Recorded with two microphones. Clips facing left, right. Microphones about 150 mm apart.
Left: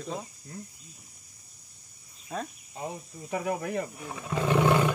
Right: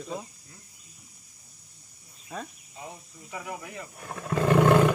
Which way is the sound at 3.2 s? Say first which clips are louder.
Left 8 dB; 45° left (ahead or behind).